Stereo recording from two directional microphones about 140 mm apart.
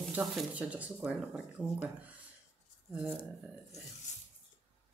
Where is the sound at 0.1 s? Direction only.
5° right (ahead or behind).